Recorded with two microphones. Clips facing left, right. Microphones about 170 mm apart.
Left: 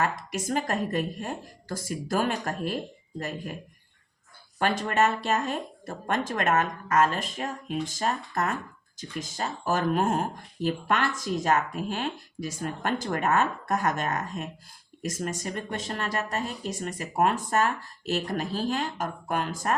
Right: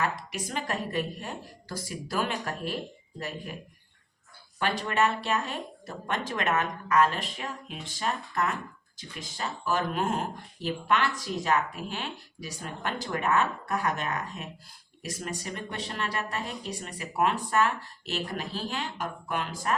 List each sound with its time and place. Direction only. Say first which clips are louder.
0.0 s speech: left 3 dB; 45° left (ahead or behind)
4.6 s speech: left 2 dB; 45° left (ahead or behind)